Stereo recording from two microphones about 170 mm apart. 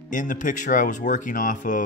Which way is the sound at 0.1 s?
50° left (ahead or behind).